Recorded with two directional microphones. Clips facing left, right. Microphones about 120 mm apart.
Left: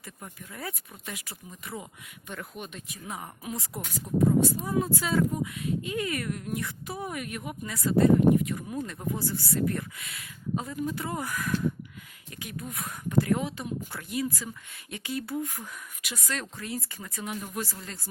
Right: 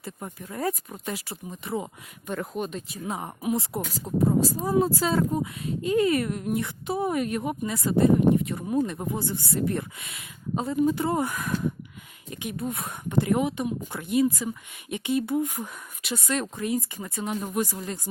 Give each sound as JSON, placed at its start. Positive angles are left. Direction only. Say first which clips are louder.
{"t": 0.0, "sound": "speech", "louder": "right 7 dB", "side_deg": -35}
{"t": 1.3, "sound": "speech", "louder": "right 8 dB", "side_deg": -25}
{"t": 2.2, "sound": "speech", "louder": "right 9 dB", "side_deg": -40}
{"t": 8.8, "sound": "speech", "louder": "right 5 dB", "side_deg": -20}
{"t": 17.2, "sound": "speech", "louder": "right 5 dB", "side_deg": -35}
{"t": 17.5, "sound": "speech", "louder": "right 7 dB", "side_deg": -20}